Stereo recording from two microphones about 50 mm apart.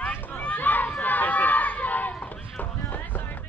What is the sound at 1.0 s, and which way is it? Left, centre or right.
Run, left.